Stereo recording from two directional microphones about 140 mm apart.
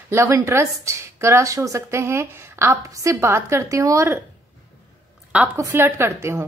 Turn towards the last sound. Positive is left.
turn(degrees=-20)  # may be behind; listen again after turning